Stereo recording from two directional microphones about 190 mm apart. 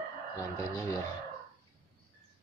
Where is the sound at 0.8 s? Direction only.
15° left (ahead or behind).